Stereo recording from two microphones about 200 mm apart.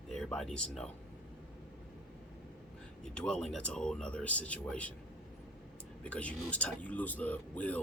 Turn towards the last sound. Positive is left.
turn(degrees=10)  # may be behind; listen again after turning